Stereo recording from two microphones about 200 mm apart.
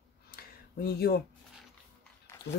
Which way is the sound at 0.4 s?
50° left (ahead or behind).